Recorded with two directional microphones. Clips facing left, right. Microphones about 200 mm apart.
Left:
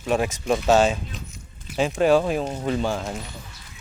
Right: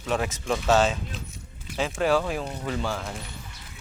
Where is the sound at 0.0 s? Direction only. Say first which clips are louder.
Left 4 dB; 15° left (ahead or behind).